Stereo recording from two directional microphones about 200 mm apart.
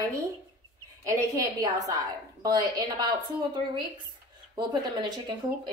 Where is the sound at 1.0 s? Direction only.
15° right (ahead or behind).